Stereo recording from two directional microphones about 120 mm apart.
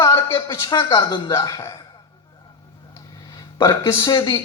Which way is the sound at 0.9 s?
30° left (ahead or behind).